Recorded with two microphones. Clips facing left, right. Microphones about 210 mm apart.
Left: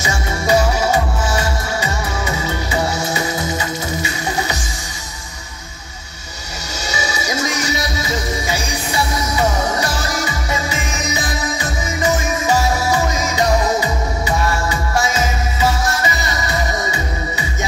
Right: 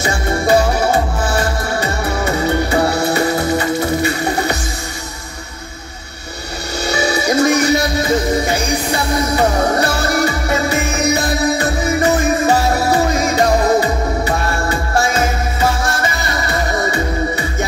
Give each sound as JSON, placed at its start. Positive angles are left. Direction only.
{"t": 0.0, "sound": "music", "side_deg": -55}
{"t": 6.9, "sound": "music", "side_deg": -55}